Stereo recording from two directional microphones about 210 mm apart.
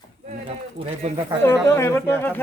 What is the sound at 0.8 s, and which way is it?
Speech, 30° right (ahead or behind).